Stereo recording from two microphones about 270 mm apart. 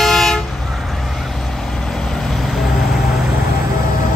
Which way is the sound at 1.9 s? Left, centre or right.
Centre.